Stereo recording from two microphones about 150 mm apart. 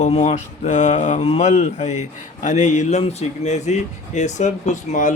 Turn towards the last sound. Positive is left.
turn(degrees=55)  # may be behind; listen again after turning